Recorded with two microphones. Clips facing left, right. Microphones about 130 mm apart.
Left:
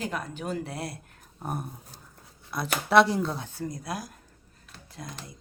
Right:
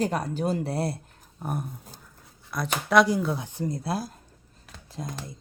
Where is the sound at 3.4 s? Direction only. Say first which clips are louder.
Right 4 dB; 20° right (ahead or behind).